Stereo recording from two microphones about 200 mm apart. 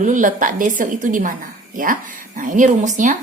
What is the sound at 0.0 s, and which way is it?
A woman's voice, 40° right (ahead or behind).